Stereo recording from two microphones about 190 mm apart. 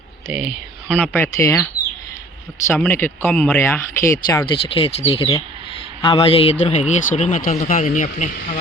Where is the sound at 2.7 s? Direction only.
10° left (ahead or behind); by 8.4 s 40° left (ahead or behind).